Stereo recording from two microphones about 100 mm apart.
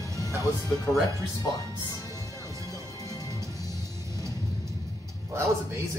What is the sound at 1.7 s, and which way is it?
Music, 40° left (ahead or behind).